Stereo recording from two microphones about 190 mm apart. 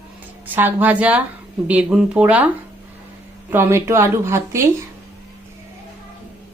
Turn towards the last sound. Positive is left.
turn(degrees=-15)  # may be behind; listen again after turning